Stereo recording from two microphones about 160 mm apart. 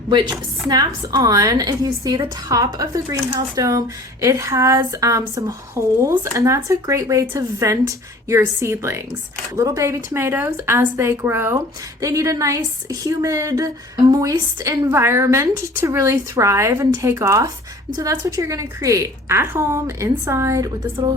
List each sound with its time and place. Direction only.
0.1 s a woman's voice: 30° right (ahead or behind)